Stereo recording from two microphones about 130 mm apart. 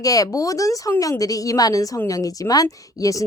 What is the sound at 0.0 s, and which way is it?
Speech, 25° left (ahead or behind).